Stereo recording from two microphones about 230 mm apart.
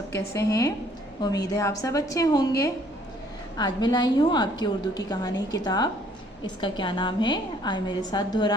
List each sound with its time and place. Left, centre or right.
0.3 s a woman's voice: centre